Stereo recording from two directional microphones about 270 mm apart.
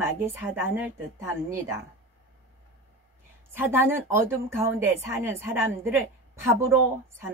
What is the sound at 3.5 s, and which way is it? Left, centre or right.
A woman's voice, centre.